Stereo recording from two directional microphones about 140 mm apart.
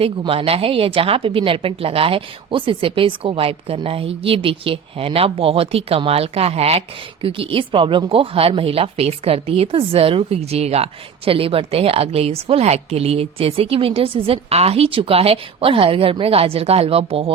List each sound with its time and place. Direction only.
0.0 s a woman's voice: 45° right (ahead or behind)